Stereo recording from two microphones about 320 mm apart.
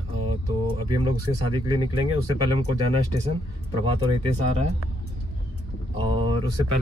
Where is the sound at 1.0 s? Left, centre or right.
Centre.